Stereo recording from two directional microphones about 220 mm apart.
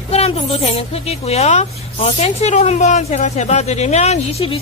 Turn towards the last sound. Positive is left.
turn(degrees=25)  # may be behind; listen again after turning